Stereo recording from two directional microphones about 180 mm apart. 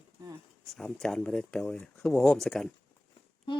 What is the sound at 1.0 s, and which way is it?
Speech, 5° left (ahead or behind).